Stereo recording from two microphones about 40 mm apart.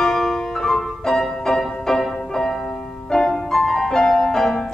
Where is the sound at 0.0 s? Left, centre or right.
Centre.